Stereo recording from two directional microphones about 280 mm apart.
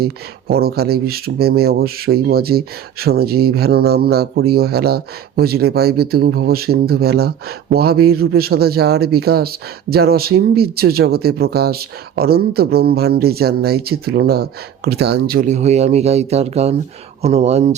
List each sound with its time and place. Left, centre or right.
0.0 s speech: right